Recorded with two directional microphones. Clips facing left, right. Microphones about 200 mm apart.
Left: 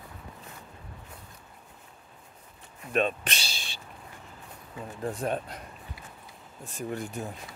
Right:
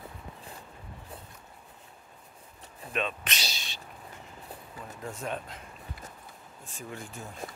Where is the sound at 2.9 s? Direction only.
45° left (ahead or behind).